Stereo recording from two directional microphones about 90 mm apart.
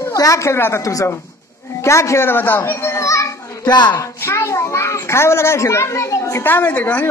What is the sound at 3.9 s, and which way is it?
A child's voice, 30° left (ahead or behind).